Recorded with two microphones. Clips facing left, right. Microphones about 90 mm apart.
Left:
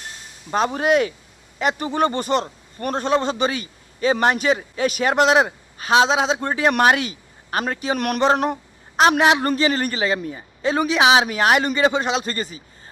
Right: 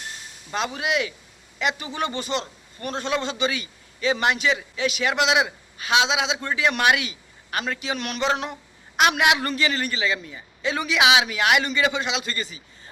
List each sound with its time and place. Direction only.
0.5 s a man's voice: 40° left (ahead or behind)
9.0 s a man's voice: 35° left (ahead or behind)